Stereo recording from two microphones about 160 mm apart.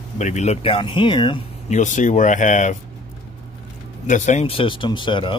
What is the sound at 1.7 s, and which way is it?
Speech, 50° left (ahead or behind).